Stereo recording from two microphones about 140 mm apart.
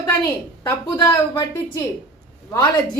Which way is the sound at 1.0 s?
30° left (ahead or behind).